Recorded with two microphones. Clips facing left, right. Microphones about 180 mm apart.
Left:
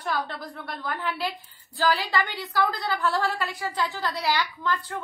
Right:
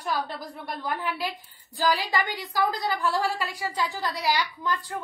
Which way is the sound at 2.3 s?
15° right (ahead or behind).